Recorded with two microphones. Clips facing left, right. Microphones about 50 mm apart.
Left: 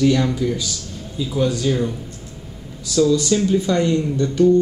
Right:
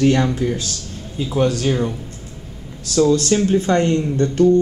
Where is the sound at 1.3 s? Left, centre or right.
Right.